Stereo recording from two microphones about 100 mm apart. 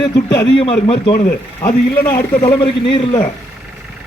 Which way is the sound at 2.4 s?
65° left (ahead or behind).